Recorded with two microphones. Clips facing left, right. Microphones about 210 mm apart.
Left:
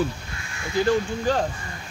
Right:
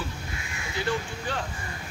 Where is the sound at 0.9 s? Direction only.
40° left (ahead or behind).